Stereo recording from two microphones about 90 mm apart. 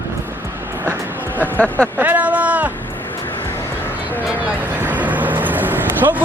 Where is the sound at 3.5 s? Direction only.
25° left (ahead or behind).